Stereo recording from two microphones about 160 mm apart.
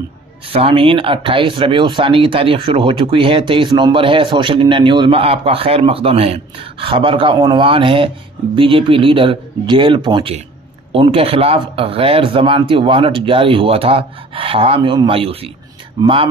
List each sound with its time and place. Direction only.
0.5 s speech: 35° right (ahead or behind)